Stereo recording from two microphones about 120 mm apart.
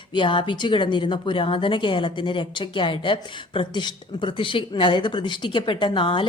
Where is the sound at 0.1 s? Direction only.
40° left (ahead or behind).